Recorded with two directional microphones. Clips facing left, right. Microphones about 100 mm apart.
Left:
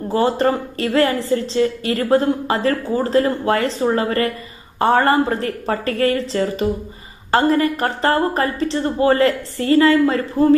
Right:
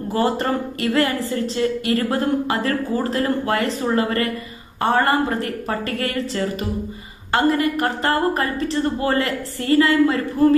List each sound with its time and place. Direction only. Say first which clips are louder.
0.1 s a woman's voice: left 3 dB; 30° left (ahead or behind)